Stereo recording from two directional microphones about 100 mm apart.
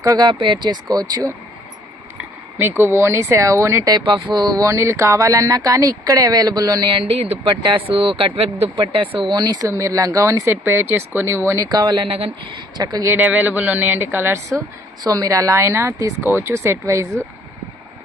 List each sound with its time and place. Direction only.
0.0 s speech: 35° right (ahead or behind)
0.3 s speech: 55° right (ahead or behind)
2.6 s speech: 20° right (ahead or behind)
3.9 s speech: 50° right (ahead or behind)
6.9 s speech: 75° right (ahead or behind)
7.6 s speech: 60° right (ahead or behind); by 8.7 s 85° right
8.7 s speech: 60° right (ahead or behind)
9.3 s speech: 45° right (ahead or behind)
9.6 s speech: 30° right (ahead or behind)
13.1 s speech: 15° right (ahead or behind)
15.0 s speech: 35° right (ahead or behind)